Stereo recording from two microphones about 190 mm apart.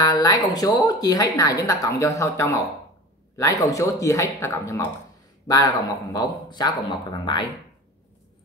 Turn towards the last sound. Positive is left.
turn(degrees=25)  # may be behind; listen again after turning